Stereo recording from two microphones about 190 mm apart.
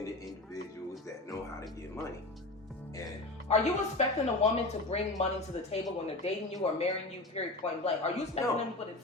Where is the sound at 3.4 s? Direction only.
35° left (ahead or behind).